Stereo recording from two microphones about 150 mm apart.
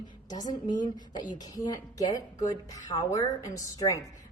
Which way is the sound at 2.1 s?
25° left (ahead or behind).